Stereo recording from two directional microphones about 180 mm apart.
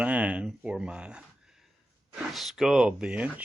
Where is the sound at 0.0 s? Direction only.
10° right (ahead or behind).